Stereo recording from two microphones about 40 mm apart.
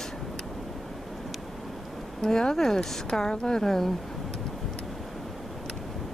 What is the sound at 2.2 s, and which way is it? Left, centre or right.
Speech, centre.